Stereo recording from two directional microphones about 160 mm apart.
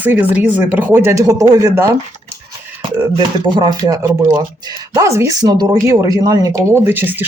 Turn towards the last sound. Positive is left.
turn(degrees=-10)  # may be behind; listen again after turning